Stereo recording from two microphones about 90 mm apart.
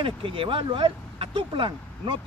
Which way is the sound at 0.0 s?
75° right (ahead or behind).